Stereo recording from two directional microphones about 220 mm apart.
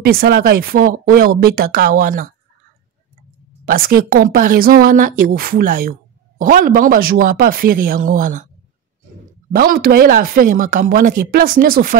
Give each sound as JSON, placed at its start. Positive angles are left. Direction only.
{"t": 0.0, "sound": "speech", "side_deg": -45}
{"t": 3.6, "sound": "speech", "side_deg": -40}
{"t": 9.5, "sound": "speech", "side_deg": -40}